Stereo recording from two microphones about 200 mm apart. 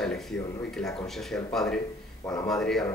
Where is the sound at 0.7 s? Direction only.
Centre (ahead or behind).